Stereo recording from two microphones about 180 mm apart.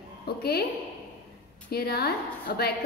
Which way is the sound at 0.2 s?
60° left (ahead or behind).